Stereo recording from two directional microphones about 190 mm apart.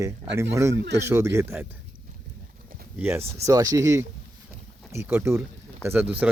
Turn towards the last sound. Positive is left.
turn(degrees=-10)  # may be behind; listen again after turning